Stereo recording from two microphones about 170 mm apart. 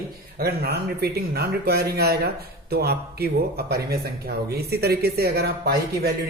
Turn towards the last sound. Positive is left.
turn(degrees=-70)  # may be behind; listen again after turning